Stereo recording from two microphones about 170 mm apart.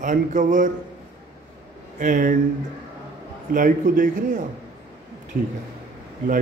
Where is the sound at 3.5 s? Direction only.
50° right (ahead or behind).